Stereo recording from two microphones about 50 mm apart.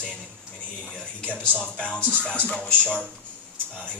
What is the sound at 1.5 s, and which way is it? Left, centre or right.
Speech, left.